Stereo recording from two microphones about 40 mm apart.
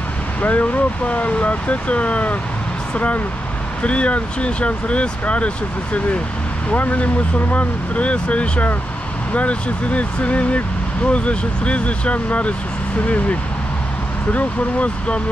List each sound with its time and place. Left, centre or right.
0.4 s speech: left
6.7 s speech: left